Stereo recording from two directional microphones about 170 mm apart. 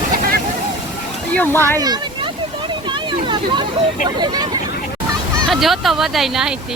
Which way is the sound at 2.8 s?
30° right (ahead or behind).